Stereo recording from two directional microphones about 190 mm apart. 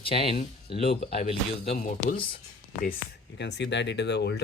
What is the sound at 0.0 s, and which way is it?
Speech, 30° left (ahead or behind).